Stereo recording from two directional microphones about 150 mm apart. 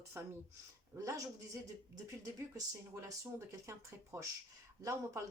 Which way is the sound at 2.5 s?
20° right (ahead or behind).